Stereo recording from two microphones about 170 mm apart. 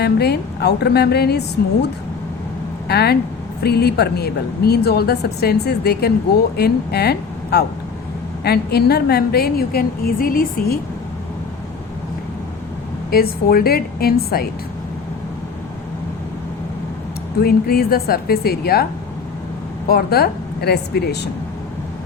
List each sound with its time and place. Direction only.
0.0 s a woman's voice: 70° left (ahead or behind)
2.8 s a woman's voice: 70° left (ahead or behind)
13.1 s a woman's voice: 60° left (ahead or behind)
17.4 s a woman's voice: 60° left (ahead or behind)
19.9 s a woman's voice: 65° left (ahead or behind)